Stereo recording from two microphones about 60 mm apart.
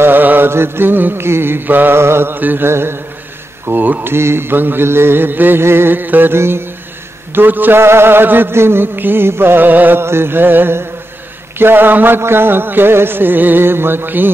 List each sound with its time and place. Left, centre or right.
0.0 s chant: right
2.7 s speech: right
3.6 s chant: right
4.1 s chant: right
6.3 s speech: right
7.3 s chant: right